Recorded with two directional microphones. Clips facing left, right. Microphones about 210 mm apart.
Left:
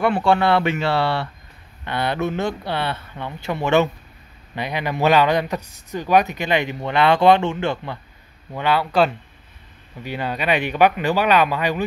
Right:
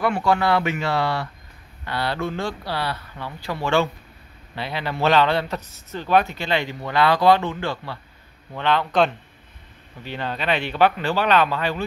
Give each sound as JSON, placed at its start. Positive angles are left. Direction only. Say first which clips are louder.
{"t": 0.0, "sound": "a man's voice", "louder": "left 3 dB", "side_deg": 30}
{"t": 8.5, "sound": "a man's voice", "louder": "left 1 dB", "side_deg": 10}